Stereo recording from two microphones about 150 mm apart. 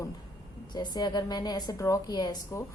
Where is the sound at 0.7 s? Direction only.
30° left (ahead or behind).